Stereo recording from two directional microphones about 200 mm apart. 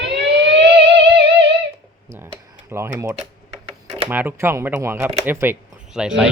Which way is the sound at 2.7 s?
15° right (ahead or behind).